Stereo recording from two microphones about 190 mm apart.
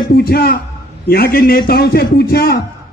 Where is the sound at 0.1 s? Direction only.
55° left (ahead or behind).